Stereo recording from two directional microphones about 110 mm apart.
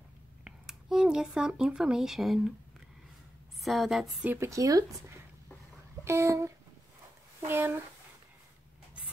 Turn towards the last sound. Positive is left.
turn(degrees=-20)  # may be behind; listen again after turning